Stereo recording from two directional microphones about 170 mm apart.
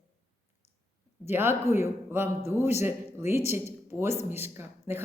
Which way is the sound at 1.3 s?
15° right (ahead or behind).